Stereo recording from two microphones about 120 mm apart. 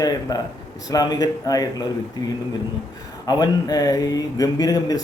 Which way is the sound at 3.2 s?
35° left (ahead or behind).